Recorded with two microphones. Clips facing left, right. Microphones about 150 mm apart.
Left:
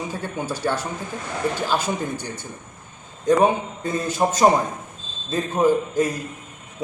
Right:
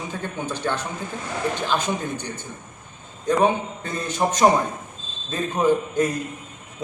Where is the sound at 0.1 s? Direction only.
10° left (ahead or behind).